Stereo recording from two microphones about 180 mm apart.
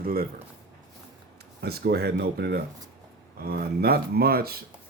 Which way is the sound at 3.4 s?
55° right (ahead or behind).